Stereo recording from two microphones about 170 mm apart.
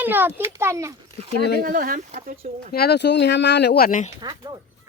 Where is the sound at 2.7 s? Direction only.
65° left (ahead or behind).